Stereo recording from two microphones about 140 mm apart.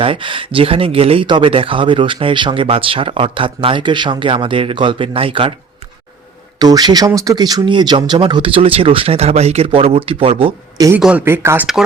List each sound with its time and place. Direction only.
0.0 s speech: 40° right (ahead or behind)
6.6 s speech: 30° right (ahead or behind)
10.9 s speech: 10° right (ahead or behind)